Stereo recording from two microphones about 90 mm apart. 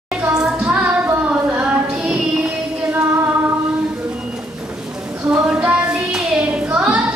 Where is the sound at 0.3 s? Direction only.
10° right (ahead or behind).